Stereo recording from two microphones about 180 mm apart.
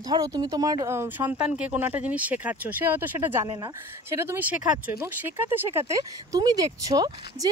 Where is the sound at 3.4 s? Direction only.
25° right (ahead or behind).